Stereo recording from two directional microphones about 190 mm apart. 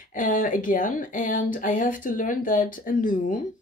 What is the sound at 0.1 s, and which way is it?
Speech, 45° left (ahead or behind).